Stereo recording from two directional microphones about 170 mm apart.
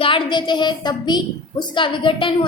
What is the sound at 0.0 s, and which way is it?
A woman's voice, 30° left (ahead or behind).